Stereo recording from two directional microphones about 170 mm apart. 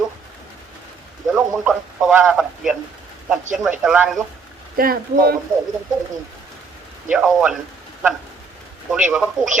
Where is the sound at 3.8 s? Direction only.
5° right (ahead or behind).